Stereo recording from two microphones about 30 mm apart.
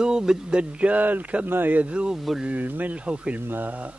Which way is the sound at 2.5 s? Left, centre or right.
Right.